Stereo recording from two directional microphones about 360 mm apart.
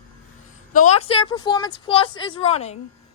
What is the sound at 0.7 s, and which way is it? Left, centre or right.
Speech, centre.